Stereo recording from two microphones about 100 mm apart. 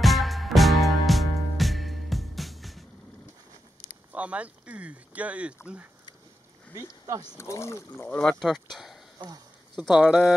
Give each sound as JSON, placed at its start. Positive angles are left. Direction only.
{"t": 0.0, "sound": "music", "side_deg": 0}
{"t": 4.1, "sound": "speech", "side_deg": -15}
{"t": 6.7, "sound": "speech", "side_deg": -35}
{"t": 7.3, "sound": "speech", "side_deg": 30}
{"t": 8.1, "sound": "speech", "side_deg": 10}
{"t": 8.4, "sound": "speech", "side_deg": 0}